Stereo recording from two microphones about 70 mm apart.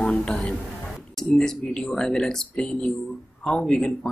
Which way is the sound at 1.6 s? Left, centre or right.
Centre.